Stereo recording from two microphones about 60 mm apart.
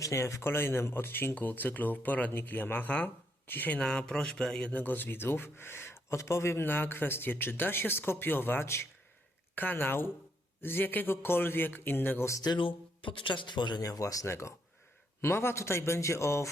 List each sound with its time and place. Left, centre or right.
0.0 s speech: left
3.8 s speech: centre
4.7 s speech: left
9.6 s speech: left
13.3 s speech: left
13.8 s speech: left
14.3 s speech: left